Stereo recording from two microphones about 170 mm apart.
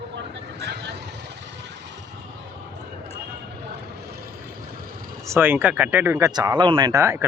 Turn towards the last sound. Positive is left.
turn(degrees=-20)  # may be behind; listen again after turning